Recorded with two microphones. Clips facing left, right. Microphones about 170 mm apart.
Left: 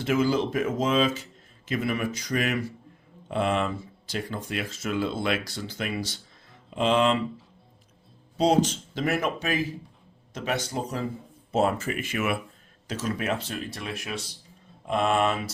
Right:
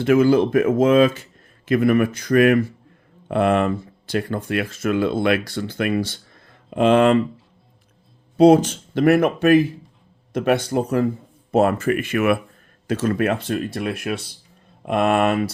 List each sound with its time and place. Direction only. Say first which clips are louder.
0.0 s speech: right 9 dB; 60° right (ahead or behind)
8.4 s speech: right 9 dB; 55° right (ahead or behind)